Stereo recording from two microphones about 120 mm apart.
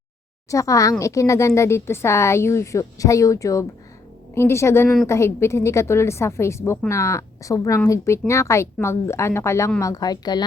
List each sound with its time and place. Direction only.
0.5 s speech: 25° left (ahead or behind)